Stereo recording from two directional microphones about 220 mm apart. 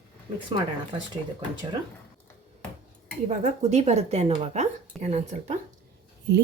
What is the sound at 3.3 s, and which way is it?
Speech, 30° right (ahead or behind).